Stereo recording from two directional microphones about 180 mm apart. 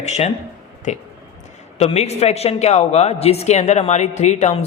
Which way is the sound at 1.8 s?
35° left (ahead or behind).